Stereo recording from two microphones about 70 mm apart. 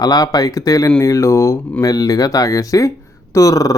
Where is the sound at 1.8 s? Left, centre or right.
Left.